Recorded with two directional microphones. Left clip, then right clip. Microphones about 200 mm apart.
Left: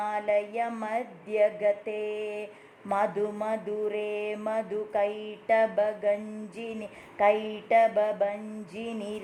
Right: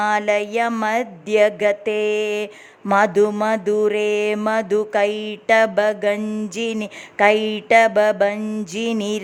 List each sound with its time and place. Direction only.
0.0 s music: 40° right (ahead or behind)